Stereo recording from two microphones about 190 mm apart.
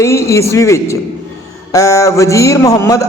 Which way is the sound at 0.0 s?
15° left (ahead or behind).